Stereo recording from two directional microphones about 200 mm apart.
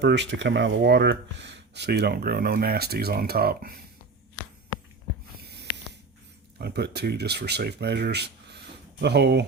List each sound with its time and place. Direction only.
0.0 s speech: 60° right (ahead or behind)
6.6 s speech: 55° right (ahead or behind)